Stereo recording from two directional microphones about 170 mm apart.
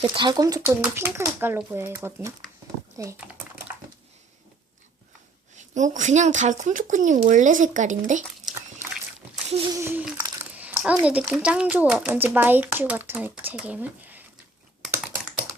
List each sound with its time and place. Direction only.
0.2 s a child's voice: 25° right (ahead or behind)
3.0 s typing: 15° right (ahead or behind)
5.5 s speech: 45° right (ahead or behind)
9.5 s a sound: 35° right (ahead or behind)
9.7 s a child's voice: 10° right (ahead or behind)
10.5 s a sound: 10° right (ahead or behind)
11.0 s a child's voice: 5° right (ahead or behind)
15.0 s computer keyboard: 10° right (ahead or behind)